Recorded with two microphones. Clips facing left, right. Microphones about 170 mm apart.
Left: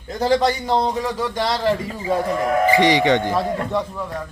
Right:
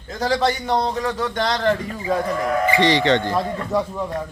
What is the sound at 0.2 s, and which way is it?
Speech, 15° left (ahead or behind).